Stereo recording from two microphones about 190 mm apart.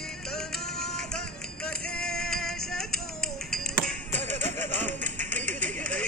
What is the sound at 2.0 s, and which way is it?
Music, 5° left (ahead or behind).